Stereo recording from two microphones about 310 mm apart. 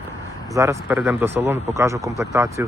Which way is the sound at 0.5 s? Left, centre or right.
Centre.